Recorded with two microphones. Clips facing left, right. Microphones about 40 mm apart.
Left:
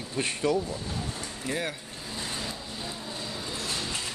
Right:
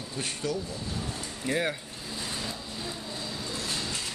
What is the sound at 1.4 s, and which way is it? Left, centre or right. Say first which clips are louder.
Speech: right 3 dB; centre.